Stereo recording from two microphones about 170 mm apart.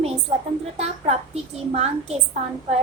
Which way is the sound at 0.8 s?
40° right (ahead or behind).